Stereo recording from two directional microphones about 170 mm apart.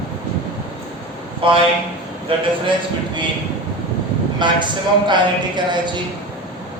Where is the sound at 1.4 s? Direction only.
30° right (ahead or behind).